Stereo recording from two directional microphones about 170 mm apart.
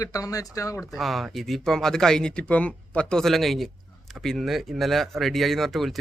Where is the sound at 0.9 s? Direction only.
Centre (ahead or behind).